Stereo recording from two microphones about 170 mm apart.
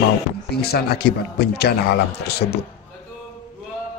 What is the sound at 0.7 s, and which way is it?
Speech, 65° left (ahead or behind).